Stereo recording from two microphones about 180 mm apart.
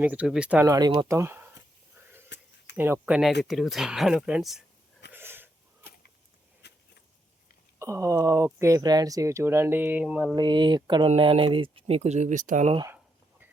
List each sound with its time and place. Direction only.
0.0 s speech: 5° right (ahead or behind)
2.3 s a sound: 75° left (ahead or behind)
2.7 s speech: 10° right (ahead or behind)
3.4 s speech: centre (ahead or behind)
5.1 s wheeze: 10° right (ahead or behind)
6.6 s a sound: 70° left (ahead or behind)
7.8 s speech: 15° right (ahead or behind)
10.3 s speech: 25° right (ahead or behind); by 12.7 s 40° right (ahead or behind)